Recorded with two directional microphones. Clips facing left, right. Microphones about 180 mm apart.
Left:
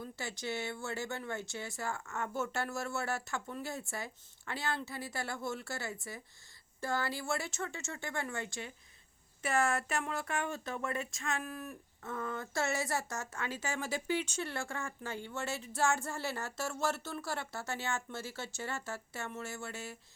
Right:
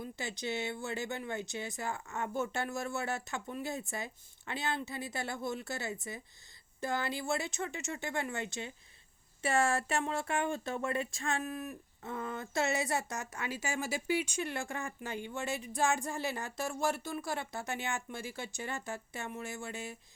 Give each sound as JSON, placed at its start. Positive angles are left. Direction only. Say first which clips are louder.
{"t": 0.0, "sound": "speech", "louder": "right 2 dB", "side_deg": -20}